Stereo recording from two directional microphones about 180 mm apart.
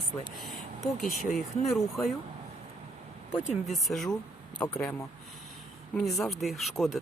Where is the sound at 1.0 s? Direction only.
45° left (ahead or behind).